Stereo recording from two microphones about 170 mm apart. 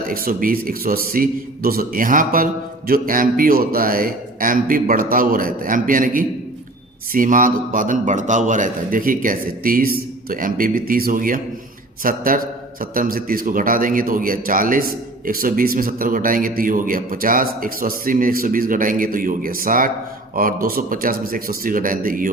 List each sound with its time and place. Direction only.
0.1 s a man's voice: 55° right (ahead or behind)